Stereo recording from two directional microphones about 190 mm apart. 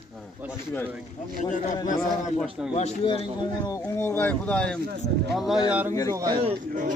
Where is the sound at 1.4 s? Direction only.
40° left (ahead or behind).